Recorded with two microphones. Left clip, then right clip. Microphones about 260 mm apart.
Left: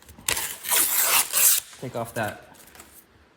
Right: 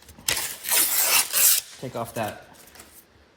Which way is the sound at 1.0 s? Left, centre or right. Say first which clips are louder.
Right 1 dB; left.